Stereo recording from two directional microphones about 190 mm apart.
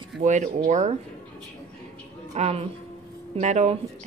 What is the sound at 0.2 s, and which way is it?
Speech, 40° right (ahead or behind).